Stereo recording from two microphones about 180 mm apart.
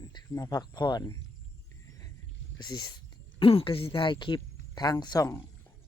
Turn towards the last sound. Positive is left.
turn(degrees=20)  # may be behind; listen again after turning